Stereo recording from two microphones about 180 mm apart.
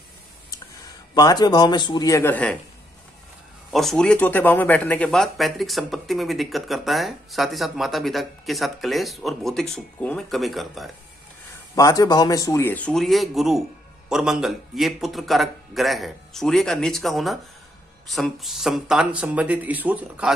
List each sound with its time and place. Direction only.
1.1 s speech: 20° left (ahead or behind)
3.7 s speech: 5° left (ahead or behind)
11.7 s a man's voice: 20° left (ahead or behind); by 20.3 s 5° right (ahead or behind)